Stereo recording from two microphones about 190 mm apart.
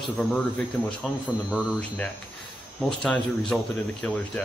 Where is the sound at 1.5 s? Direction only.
5° right (ahead or behind).